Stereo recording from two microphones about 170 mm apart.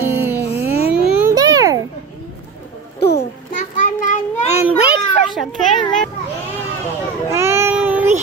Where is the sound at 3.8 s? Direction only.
45° left (ahead or behind).